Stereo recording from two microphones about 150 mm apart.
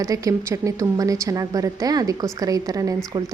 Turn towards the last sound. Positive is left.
turn(degrees=-25)  # may be behind; listen again after turning